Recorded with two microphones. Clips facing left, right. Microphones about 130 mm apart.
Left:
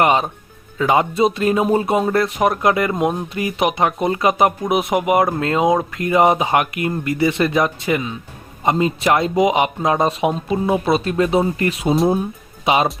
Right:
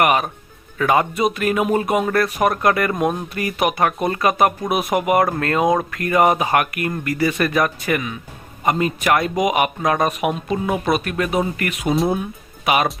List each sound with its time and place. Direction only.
0.0 s speech: 25° left (ahead or behind)